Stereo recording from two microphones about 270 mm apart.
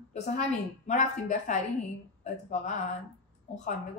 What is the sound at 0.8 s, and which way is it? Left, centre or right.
A woman's voice, left.